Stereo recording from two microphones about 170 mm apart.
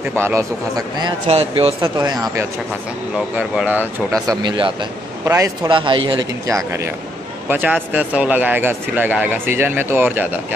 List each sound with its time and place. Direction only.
0.2 s speech: 15° right (ahead or behind)
1.2 s speech: 40° right (ahead or behind)
1.8 s speech: 25° right (ahead or behind)
3.2 s speech: 5° right (ahead or behind); by 4.8 s 30° right (ahead or behind)
5.2 s speech: 15° right (ahead or behind)
5.7 s speech: 30° right (ahead or behind)
6.4 s speech: 15° right (ahead or behind)